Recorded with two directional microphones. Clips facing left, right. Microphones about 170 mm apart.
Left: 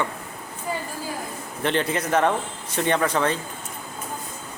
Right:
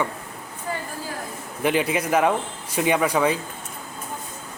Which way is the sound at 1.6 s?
10° right (ahead or behind).